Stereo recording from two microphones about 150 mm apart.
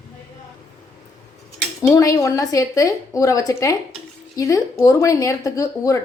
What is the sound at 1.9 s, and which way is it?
Speech, 20° left (ahead or behind).